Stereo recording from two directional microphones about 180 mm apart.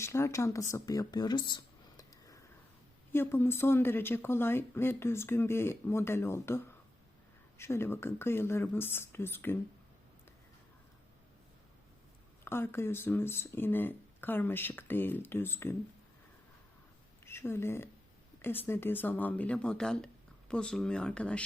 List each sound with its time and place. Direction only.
0.0 s speech: 15° left (ahead or behind)
7.6 s speech: 15° left (ahead or behind)
12.5 s speech: 15° left (ahead or behind)
17.2 s a woman's voice: 15° left (ahead or behind)